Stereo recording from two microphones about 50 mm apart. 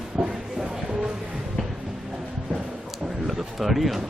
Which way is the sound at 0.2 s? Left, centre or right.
Centre.